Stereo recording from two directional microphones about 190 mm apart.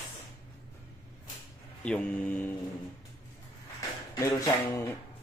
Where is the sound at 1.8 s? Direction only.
5° left (ahead or behind).